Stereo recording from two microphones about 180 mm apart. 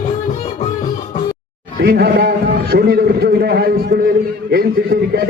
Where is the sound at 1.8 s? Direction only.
65° right (ahead or behind).